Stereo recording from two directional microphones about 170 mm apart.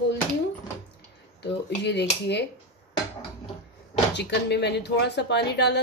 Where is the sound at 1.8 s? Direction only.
85° left.